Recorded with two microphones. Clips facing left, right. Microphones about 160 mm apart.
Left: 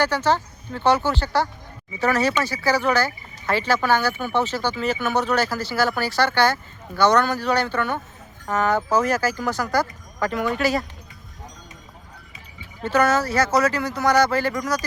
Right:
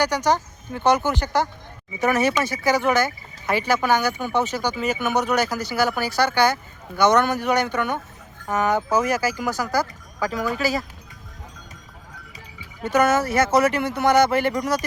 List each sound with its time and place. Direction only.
0.0 s speech: 15° right (ahead or behind)
12.8 s speech: 20° right (ahead or behind)